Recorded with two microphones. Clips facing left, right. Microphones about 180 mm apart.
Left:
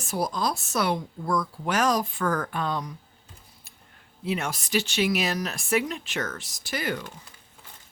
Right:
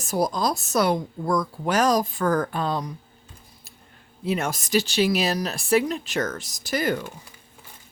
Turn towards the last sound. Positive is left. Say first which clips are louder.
# right 6 dB
turn(degrees=-40)  # may be behind; listen again after turning